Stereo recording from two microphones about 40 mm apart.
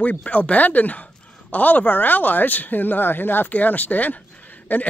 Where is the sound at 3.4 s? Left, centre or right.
Left.